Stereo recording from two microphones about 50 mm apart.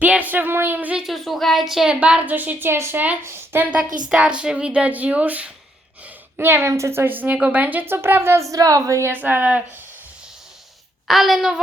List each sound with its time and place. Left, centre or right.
0.0 s a sound: right
1.0 s speech: centre
1.9 s a woman's voice: right
2.6 s a woman's voice: right
3.8 s speech: centre
6.3 s speech: right
6.7 s a woman's voice: right
6.9 s a woman's voice: right
7.9 s speech: right
8.4 s a woman's voice: right
9.1 s a woman's voice: right
11.1 s a woman's voice: centre